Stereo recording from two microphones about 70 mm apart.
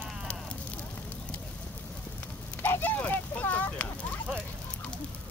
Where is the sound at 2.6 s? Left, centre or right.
Left.